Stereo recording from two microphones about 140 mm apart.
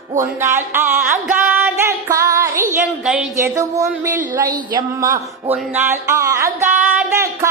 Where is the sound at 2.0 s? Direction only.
20° right (ahead or behind).